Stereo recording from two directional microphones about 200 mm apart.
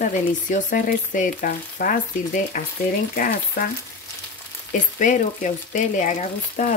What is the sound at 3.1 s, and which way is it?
Speech, 45° left (ahead or behind).